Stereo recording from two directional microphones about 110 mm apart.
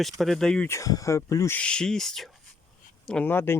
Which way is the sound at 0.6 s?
30° left (ahead or behind).